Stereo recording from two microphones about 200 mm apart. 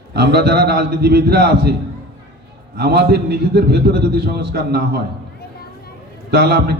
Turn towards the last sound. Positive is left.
turn(degrees=-50)  # may be behind; listen again after turning